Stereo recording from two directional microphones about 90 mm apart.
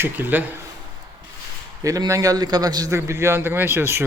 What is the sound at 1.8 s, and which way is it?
A man's voice, 40° right (ahead or behind).